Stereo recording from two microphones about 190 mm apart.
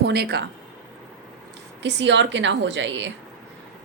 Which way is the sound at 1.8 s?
70° right (ahead or behind).